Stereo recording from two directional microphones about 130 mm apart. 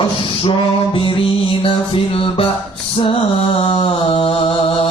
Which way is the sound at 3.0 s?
45° left (ahead or behind).